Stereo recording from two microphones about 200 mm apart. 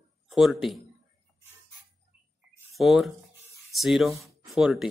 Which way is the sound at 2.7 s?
Centre (ahead or behind).